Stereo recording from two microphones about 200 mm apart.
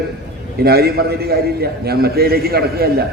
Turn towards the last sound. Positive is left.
turn(degrees=-50)  # may be behind; listen again after turning